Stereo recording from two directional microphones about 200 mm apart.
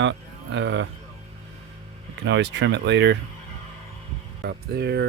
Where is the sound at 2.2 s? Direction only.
60° right (ahead or behind).